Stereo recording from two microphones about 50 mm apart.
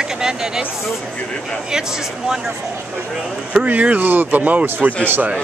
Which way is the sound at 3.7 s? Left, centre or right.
Right.